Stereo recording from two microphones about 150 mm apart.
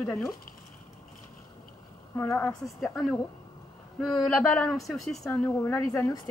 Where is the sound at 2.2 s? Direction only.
15° left (ahead or behind).